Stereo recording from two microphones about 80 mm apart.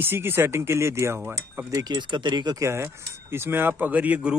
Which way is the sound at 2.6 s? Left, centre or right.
Right.